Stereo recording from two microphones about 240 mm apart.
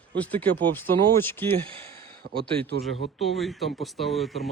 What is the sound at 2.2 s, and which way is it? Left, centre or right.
Speech, right.